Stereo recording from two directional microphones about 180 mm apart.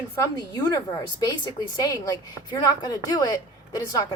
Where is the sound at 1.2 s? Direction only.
20° left (ahead or behind).